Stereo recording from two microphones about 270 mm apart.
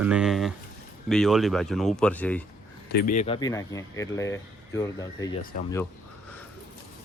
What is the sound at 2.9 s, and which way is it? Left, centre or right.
Speech, left.